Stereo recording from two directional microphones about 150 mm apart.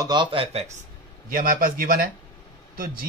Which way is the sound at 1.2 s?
65° right (ahead or behind).